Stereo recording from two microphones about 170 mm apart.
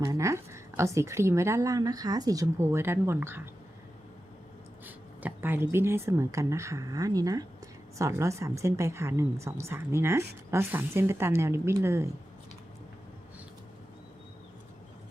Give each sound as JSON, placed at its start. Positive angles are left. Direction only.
{"t": 0.0, "sound": "a woman's voice", "side_deg": -20}
{"t": 4.9, "sound": "a woman's voice", "side_deg": -10}